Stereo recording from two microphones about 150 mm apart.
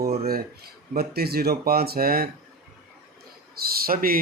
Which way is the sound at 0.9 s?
90° right.